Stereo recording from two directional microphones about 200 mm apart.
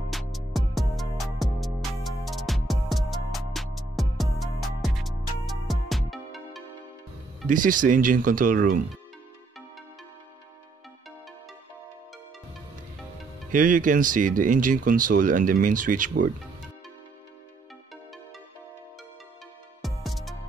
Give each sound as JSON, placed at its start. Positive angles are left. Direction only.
{"t": 0.1, "sound": "music", "side_deg": 0}
{"t": 7.4, "sound": "speech", "side_deg": -40}
{"t": 13.5, "sound": "speech", "side_deg": -40}
{"t": 19.8, "sound": "music", "side_deg": 0}